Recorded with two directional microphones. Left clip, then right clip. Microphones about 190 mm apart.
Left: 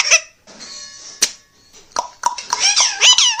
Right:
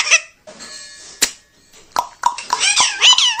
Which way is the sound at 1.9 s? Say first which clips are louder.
Right 2 dB; 30° right (ahead or behind).